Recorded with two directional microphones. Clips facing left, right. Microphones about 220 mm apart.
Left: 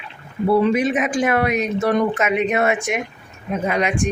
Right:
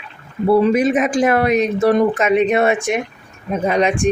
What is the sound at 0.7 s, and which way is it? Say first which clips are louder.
Speech: right 4 dB; 40° right (ahead or behind).